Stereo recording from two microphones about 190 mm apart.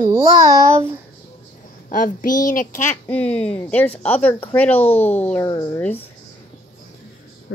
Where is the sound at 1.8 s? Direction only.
45° left (ahead or behind).